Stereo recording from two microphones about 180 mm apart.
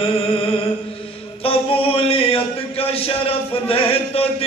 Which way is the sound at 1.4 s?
30° left (ahead or behind).